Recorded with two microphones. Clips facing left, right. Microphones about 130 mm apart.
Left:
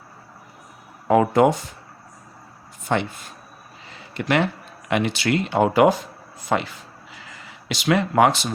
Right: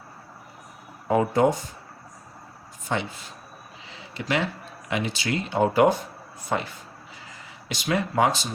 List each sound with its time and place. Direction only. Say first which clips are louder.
1.0 s speech: left 4 dB; 80° left
2.8 s speech: left 5 dB; 60° left (ahead or behind)
3.8 s a sound: left 5 dB; 55° left (ahead or behind)
4.9 s speech: left 6 dB; 65° left (ahead or behind)